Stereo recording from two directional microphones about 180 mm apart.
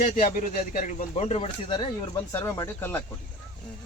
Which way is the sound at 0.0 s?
50° left (ahead or behind).